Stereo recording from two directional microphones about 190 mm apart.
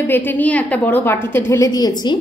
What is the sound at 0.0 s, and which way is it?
A woman's voice, 10° left (ahead or behind).